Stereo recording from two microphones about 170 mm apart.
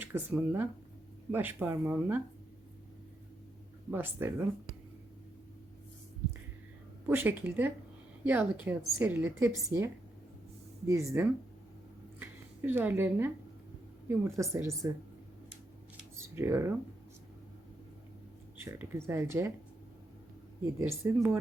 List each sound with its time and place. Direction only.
0.0 s speech: 10° right (ahead or behind)
3.9 s speech: 10° right (ahead or behind)
7.1 s a woman's voice: 10° right (ahead or behind)
16.3 s speech: 15° right (ahead or behind)
18.6 s speech: 15° right (ahead or behind)
20.7 s speech: 15° right (ahead or behind)